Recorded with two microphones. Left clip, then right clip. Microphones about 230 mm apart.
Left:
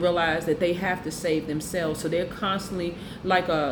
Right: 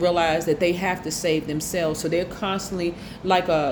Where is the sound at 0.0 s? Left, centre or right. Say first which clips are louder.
Right 3 dB; right.